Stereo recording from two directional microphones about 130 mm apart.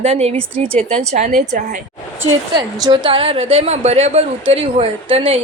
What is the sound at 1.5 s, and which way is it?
Speech, 90° right.